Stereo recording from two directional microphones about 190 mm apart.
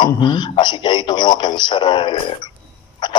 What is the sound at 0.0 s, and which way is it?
Speech, 25° left (ahead or behind).